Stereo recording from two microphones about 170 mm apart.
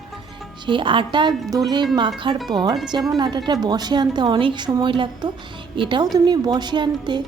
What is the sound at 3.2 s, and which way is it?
Speech, 25° right (ahead or behind).